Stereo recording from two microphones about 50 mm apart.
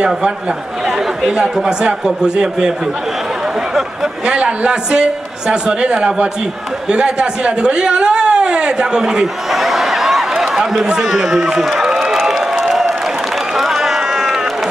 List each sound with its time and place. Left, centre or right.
0.8 s speech: centre
4.3 s a man's voice: right
6.9 s a sound: centre
11.0 s a man's voice: centre
11.8 s a sound: centre
12.6 s applause: centre
13.6 s run: centre